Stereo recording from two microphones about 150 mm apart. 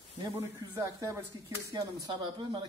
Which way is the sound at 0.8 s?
20° right (ahead or behind).